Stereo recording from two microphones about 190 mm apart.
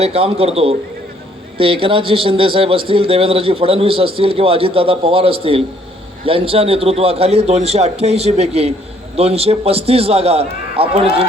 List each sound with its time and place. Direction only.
0.0 s a man's voice: 30° right (ahead or behind)